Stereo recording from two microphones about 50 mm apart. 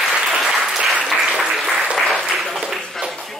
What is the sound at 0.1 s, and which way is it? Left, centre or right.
Applause, centre.